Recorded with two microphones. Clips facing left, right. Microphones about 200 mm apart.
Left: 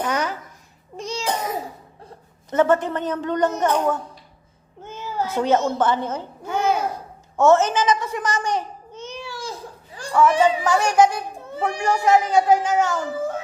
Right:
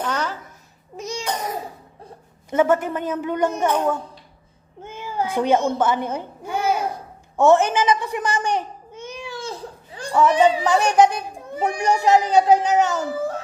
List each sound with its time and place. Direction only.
0.0 s a child's voice: 10° left (ahead or behind)
0.9 s a sound: 10° right (ahead or behind)
2.5 s a child's voice: 10° right (ahead or behind)